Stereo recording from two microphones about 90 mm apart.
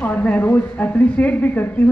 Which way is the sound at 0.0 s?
20° left (ahead or behind).